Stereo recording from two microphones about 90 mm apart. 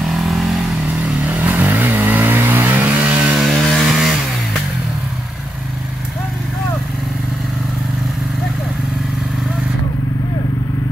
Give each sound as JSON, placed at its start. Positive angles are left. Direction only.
{"t": 0.0, "sound": "vehicle", "side_deg": 0}
{"t": 1.2, "sound": "vehicle", "side_deg": -15}
{"t": 3.3, "sound": "chainsaw", "side_deg": 0}